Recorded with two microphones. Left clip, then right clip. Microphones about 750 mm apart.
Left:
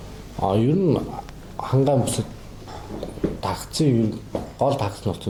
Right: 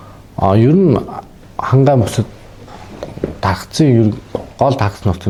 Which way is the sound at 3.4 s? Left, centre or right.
Right.